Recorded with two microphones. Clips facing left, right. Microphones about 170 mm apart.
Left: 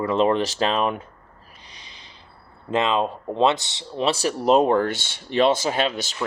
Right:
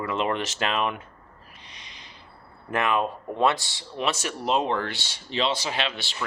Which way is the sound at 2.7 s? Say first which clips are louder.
Left 3 dB; 20° left (ahead or behind).